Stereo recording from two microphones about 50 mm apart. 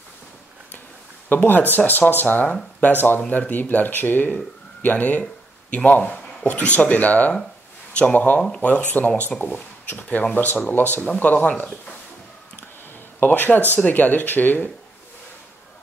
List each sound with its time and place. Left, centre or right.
1.3 s speech: left
13.2 s speech: left